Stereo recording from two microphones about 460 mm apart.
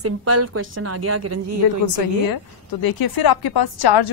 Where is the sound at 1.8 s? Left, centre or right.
Left.